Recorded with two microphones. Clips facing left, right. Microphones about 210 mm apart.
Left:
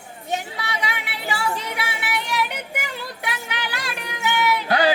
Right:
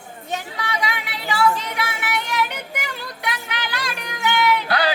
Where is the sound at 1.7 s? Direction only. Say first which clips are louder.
Right 2 dB; 10° left (ahead or behind).